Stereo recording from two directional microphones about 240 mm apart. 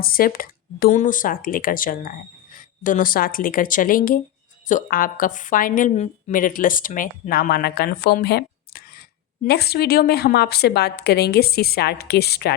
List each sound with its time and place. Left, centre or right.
0.0 s a woman's voice: left